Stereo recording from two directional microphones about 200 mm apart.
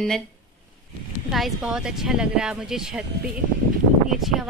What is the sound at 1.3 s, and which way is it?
A woman's voice, centre (ahead or behind).